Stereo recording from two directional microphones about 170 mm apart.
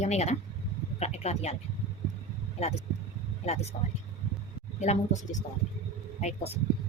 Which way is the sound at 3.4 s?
40° left (ahead or behind).